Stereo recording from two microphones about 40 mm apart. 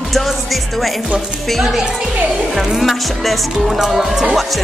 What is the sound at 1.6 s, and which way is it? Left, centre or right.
Speech, centre.